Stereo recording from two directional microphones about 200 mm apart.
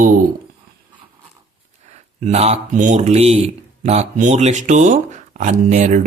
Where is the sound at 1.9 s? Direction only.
35° right (ahead or behind).